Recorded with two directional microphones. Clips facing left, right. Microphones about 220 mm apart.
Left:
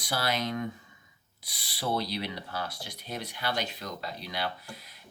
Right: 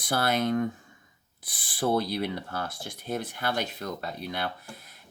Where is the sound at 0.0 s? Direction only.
50° right (ahead or behind).